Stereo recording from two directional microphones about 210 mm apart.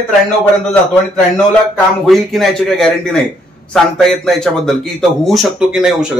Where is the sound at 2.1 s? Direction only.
Centre (ahead or behind).